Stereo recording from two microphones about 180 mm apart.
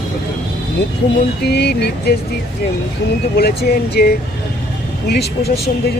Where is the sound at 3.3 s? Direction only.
60° left (ahead or behind).